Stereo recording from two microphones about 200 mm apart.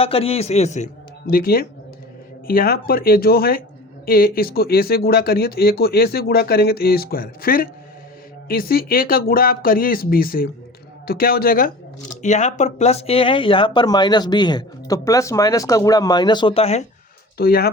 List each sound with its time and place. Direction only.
0.0 s a man's voice: 30° left (ahead or behind)
1.3 s speech: 50° left (ahead or behind)
12.2 s speech: 35° left (ahead or behind)
17.3 s speech: 50° left (ahead or behind)